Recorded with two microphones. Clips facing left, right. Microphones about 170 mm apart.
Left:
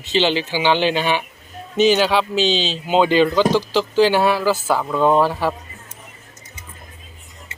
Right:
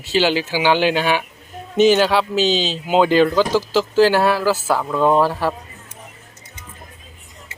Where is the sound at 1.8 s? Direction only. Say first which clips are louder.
Right 1 dB; 50° right (ahead or behind).